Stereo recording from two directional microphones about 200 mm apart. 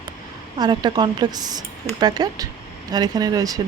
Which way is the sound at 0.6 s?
20° right (ahead or behind).